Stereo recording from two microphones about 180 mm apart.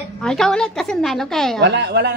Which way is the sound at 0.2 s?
5° left (ahead or behind).